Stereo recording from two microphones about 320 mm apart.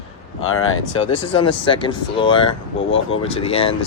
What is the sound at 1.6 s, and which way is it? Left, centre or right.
Speech, centre.